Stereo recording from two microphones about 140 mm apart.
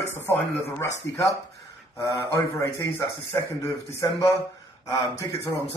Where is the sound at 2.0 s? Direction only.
25° left (ahead or behind).